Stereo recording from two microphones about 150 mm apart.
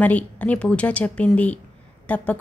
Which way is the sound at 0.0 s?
10° left (ahead or behind).